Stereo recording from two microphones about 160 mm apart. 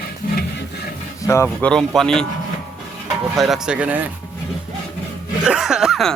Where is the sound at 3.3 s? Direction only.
Centre (ahead or behind).